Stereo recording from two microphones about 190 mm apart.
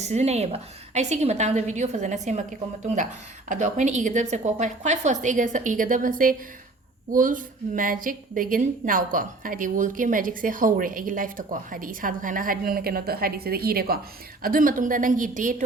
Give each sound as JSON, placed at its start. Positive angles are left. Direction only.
{"t": 0.0, "sound": "a woman's voice", "side_deg": -35}
{"t": 3.5, "sound": "a woman's voice", "side_deg": -40}